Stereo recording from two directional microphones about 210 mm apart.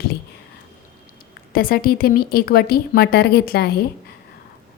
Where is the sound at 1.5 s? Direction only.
45° left (ahead or behind).